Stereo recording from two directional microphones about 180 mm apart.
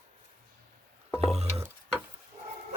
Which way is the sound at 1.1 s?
35° right (ahead or behind).